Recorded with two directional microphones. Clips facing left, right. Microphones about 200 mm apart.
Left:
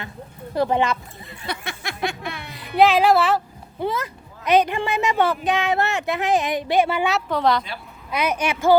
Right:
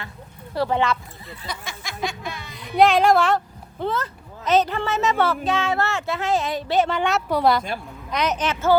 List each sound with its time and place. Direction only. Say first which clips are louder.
0.5 s speech: left 1 dB; 20° left (ahead or behind)
1.5 s speech: left 4 dB; 60° left (ahead or behind)
2.7 s speech: even; centre (ahead or behind)
7.3 s speech: right 3 dB; 10° right (ahead or behind)
8.1 s speech: left 1 dB; 10° left (ahead or behind)